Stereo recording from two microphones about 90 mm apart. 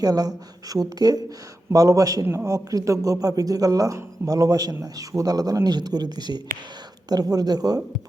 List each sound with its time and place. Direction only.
0.0 s a man's voice: 45° right (ahead or behind)